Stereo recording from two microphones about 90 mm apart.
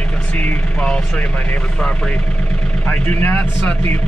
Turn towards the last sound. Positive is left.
turn(degrees=20)  # may be behind; listen again after turning